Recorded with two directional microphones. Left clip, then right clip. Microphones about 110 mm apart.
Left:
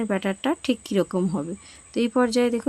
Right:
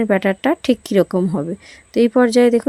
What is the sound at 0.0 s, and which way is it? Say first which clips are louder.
Speech: right 9 dB; 50° right (ahead or behind).